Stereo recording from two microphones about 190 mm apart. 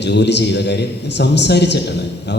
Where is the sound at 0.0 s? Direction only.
65° left (ahead or behind).